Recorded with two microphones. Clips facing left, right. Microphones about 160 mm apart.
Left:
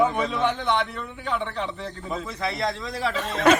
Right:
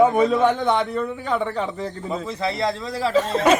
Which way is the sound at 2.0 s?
30° right (ahead or behind).